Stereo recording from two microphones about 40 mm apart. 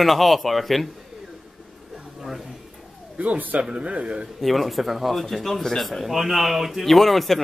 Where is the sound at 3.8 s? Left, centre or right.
Right.